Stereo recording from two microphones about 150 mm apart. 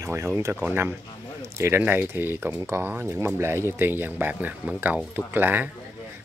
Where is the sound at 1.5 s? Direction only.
15° right (ahead or behind).